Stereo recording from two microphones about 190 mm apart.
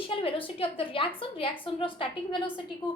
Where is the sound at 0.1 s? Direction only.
30° left (ahead or behind).